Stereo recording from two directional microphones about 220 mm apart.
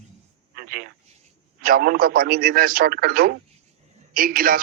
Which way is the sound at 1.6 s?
40° right (ahead or behind).